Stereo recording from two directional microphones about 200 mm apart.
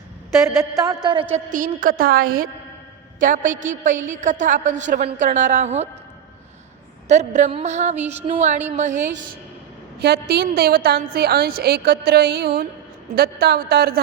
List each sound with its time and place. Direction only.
0.4 s a sound: 15° right (ahead or behind)
1.5 s a woman's voice: 40° right (ahead or behind)
7.1 s a woman's voice: 35° right (ahead or behind)
10.0 s a woman's voice: 55° right (ahead or behind)